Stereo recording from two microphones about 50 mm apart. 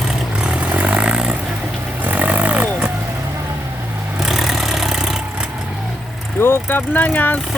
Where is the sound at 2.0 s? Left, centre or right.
Right.